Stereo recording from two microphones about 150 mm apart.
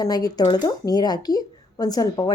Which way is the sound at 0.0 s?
25° left (ahead or behind).